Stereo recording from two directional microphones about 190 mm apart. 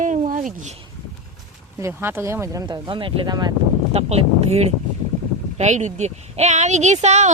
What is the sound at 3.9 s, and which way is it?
A woman's voice, 35° right (ahead or behind).